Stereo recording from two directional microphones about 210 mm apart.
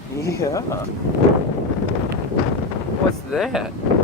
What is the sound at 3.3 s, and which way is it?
Speech, centre (ahead or behind).